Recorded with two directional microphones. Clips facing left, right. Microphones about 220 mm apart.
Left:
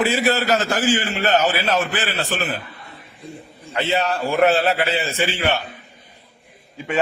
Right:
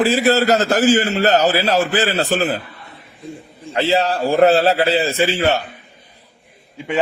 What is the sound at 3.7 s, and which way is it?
A man's voice, 30° right (ahead or behind).